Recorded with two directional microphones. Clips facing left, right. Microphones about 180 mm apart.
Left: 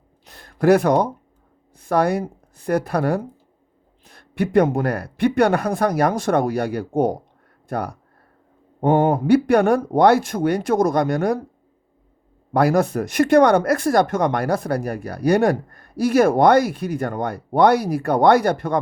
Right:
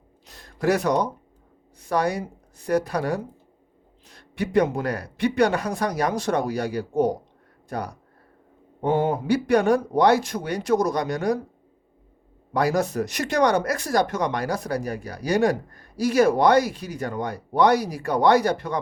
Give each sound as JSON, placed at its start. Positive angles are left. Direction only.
{"t": 0.3, "sound": "a sound", "side_deg": 55}
{"t": 1.8, "sound": "speech", "side_deg": 55}
{"t": 12.5, "sound": "speech", "side_deg": 55}